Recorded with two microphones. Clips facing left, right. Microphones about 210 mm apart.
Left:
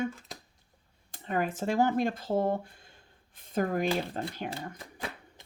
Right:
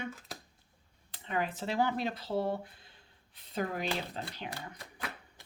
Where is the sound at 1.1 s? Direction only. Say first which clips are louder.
Left 4 dB; 45° left (ahead or behind).